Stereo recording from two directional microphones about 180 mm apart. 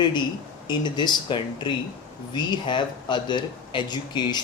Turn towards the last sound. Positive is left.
turn(degrees=25)  # may be behind; listen again after turning